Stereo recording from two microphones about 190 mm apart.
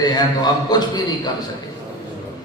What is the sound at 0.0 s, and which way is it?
Speech, 20° left (ahead or behind).